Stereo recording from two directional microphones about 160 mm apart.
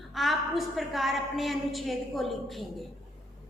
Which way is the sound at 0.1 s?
Centre (ahead or behind).